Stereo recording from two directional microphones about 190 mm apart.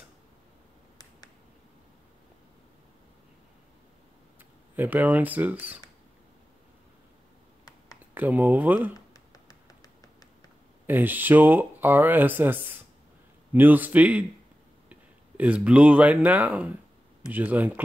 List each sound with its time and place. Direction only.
4.7 s speech: 10° right (ahead or behind)
8.1 s speech: 10° right (ahead or behind)
8.9 s beatboxing: 20° left (ahead or behind)
10.9 s speech: 10° right (ahead or behind)